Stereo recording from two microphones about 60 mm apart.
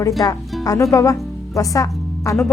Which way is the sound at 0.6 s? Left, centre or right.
Left.